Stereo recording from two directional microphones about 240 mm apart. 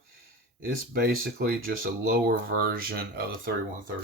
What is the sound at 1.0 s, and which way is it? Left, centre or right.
Speech, right.